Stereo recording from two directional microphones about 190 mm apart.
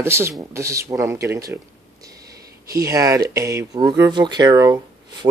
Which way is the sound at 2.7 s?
20° right (ahead or behind).